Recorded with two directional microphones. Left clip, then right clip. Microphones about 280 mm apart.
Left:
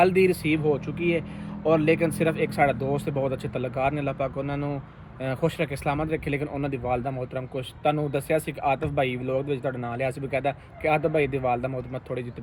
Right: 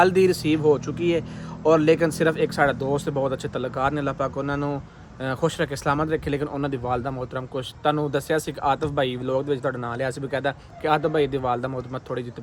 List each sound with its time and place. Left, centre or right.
0.0 s speech: centre